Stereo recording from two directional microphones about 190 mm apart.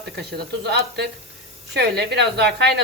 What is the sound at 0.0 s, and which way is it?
A woman's voice, 60° right (ahead or behind).